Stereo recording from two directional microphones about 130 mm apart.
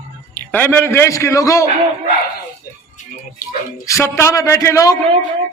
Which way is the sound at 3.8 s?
25° left (ahead or behind).